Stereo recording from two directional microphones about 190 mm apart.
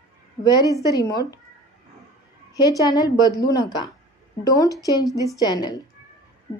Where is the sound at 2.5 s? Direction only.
20° left (ahead or behind).